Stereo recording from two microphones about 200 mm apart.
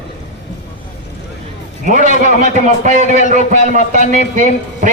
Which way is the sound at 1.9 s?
40° right (ahead or behind).